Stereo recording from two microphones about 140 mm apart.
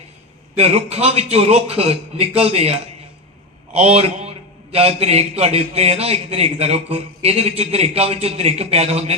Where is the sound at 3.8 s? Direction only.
45° right (ahead or behind).